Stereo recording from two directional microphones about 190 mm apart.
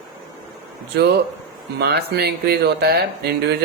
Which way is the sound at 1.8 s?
60° right (ahead or behind).